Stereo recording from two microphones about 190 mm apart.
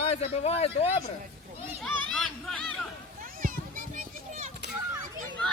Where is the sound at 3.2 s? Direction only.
45° right (ahead or behind).